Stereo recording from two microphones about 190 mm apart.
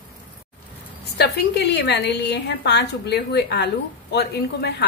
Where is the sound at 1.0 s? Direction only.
65° left (ahead or behind).